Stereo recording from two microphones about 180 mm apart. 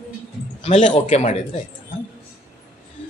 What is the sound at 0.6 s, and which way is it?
Speech, 40° left (ahead or behind).